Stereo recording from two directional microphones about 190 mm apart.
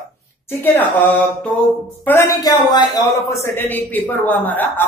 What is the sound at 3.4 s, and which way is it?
Speech, 10° left (ahead or behind).